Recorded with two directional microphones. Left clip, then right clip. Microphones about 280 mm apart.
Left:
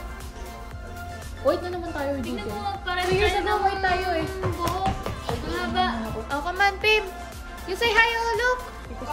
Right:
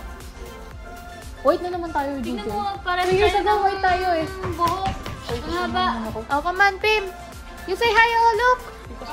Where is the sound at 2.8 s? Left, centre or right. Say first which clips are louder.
Right 4 dB; centre.